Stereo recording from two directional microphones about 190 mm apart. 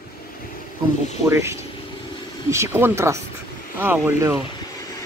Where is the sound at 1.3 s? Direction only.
15° right (ahead or behind).